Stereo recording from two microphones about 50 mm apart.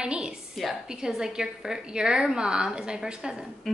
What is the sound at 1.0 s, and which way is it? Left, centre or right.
A woman's voice, centre.